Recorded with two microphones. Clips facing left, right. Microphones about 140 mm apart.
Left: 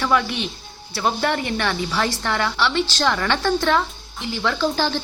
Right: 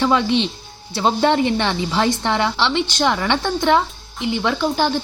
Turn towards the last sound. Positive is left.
turn(degrees=-15)  # may be behind; listen again after turning